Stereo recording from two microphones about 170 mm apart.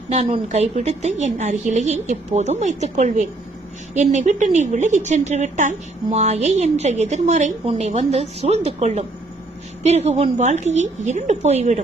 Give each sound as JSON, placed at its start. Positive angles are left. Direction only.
{"t": 0.1, "sound": "a woman's voice", "side_deg": -40}